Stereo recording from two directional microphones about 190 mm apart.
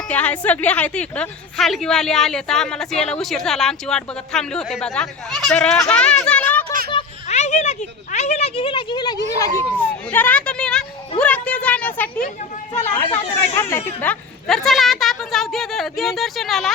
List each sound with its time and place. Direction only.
0.1 s a woman's voice: 5° left (ahead or behind)
6.9 s a sound: 35° left (ahead or behind); by 12.2 s 10° left (ahead or behind)
13.6 s a woman's voice: 15° left (ahead or behind)